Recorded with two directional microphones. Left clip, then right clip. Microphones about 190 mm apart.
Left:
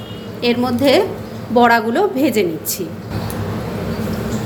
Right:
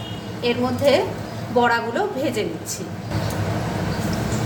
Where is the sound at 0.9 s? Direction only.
45° left (ahead or behind).